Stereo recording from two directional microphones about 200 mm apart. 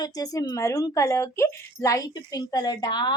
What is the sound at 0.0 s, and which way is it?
Speech, 20° left (ahead or behind).